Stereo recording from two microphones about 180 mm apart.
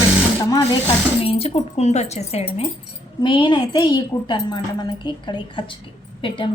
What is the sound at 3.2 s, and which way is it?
A woman's voice, 25° left (ahead or behind).